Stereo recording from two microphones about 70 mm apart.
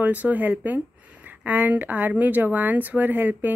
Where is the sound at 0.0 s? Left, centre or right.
Right.